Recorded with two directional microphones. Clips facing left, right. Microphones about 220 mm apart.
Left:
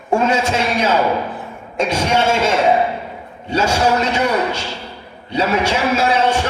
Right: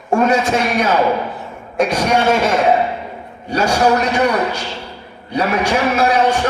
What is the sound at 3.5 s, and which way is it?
Speech, 25° left (ahead or behind).